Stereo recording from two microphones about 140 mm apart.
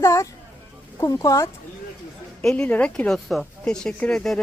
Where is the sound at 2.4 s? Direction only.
10° left (ahead or behind).